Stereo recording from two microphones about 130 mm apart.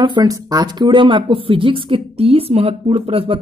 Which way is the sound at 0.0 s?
35° right (ahead or behind).